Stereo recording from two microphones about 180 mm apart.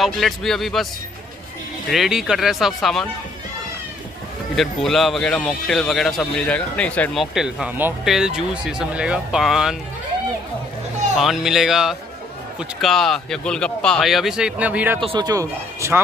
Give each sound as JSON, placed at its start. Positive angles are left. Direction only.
{"t": 0.0, "sound": "speech", "side_deg": 0}
{"t": 1.9, "sound": "speech", "side_deg": 0}
{"t": 4.6, "sound": "speech", "side_deg": 0}
{"t": 11.1, "sound": "speech", "side_deg": 0}
{"t": 15.0, "sound": "speech", "side_deg": -25}